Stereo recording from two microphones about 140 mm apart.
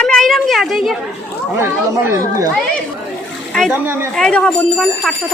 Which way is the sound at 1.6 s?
20° right (ahead or behind).